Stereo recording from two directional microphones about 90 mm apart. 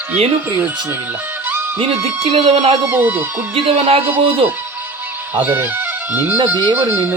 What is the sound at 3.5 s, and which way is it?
Speech, 90° right.